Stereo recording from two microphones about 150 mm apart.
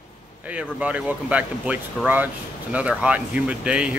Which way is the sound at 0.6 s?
10° right (ahead or behind).